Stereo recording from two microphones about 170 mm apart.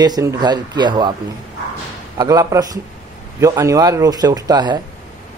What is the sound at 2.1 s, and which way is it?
Speech, 20° right (ahead or behind).